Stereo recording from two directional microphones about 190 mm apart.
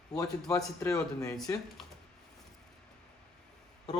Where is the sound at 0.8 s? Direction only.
15° left (ahead or behind).